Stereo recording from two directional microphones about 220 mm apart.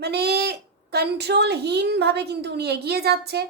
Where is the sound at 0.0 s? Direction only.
45° right (ahead or behind).